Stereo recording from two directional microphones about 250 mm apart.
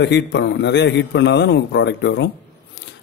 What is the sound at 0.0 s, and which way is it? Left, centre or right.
A man's voice, left.